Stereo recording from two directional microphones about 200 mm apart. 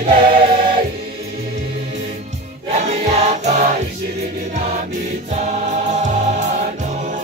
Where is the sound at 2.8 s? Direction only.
35° right (ahead or behind).